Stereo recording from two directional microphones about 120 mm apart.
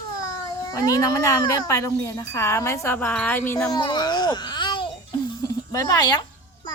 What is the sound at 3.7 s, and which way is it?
Babbling, 35° left (ahead or behind).